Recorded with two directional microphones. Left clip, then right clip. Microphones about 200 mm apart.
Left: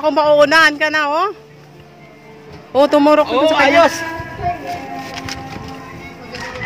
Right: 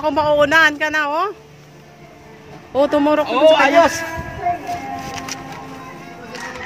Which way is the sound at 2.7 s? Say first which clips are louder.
Left 4 dB; 15° left (ahead or behind).